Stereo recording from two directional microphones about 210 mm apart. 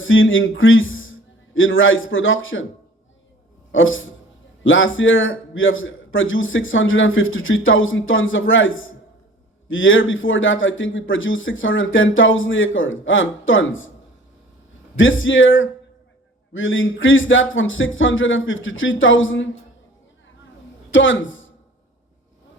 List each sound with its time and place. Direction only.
0.0 s a man's voice: 65° left (ahead or behind)
3.7 s a man's voice: 65° left (ahead or behind)
14.9 s a man's voice: 65° left (ahead or behind)
20.9 s speech: 65° left (ahead or behind)